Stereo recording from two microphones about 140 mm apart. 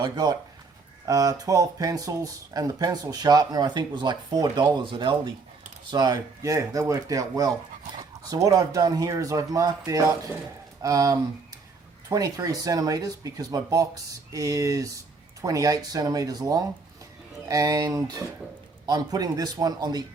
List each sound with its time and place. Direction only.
0.0 s speech: 30° right (ahead or behind)